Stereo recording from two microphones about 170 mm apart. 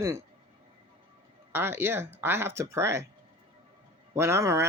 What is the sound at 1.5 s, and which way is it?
Speech, 15° right (ahead or behind).